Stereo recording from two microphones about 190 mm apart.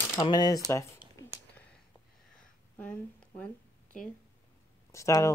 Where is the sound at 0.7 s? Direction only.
15° left (ahead or behind).